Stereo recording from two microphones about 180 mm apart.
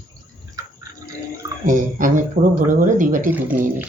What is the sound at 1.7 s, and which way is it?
Speech, 45° right (ahead or behind).